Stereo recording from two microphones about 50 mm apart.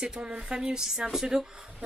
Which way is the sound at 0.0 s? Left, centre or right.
Right.